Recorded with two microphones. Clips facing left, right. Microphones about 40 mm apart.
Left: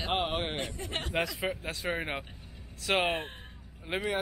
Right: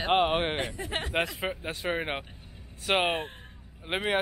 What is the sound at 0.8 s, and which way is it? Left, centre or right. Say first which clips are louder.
Speech: right 3 dB; centre.